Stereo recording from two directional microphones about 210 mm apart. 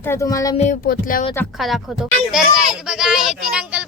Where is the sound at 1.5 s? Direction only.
Centre (ahead or behind).